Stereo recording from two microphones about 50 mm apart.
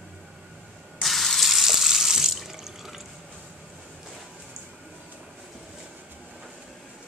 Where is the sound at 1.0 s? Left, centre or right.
Centre.